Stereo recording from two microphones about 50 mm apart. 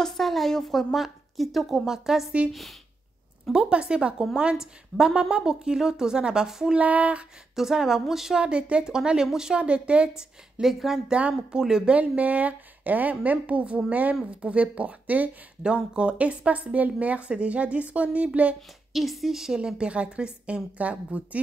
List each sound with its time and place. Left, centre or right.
0.0 s a woman's voice: centre
3.5 s a woman's voice: centre
6.8 s speech: right
7.5 s a woman's voice: centre
8.4 s a woman's voice: centre
10.6 s speech: centre
11.1 s speech: right
11.6 s a woman's voice: centre
11.9 s a woman's voice: right
18.9 s a woman's voice: centre; by 21.4 s right